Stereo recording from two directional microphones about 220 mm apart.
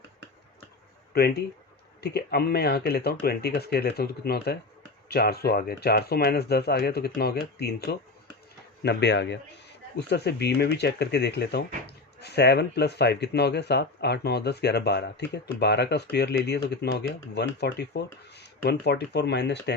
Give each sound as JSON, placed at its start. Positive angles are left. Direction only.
{"t": 1.1, "sound": "speech", "side_deg": 45}